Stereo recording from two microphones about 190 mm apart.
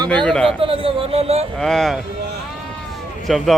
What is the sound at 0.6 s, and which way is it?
Speech, 30° right (ahead or behind).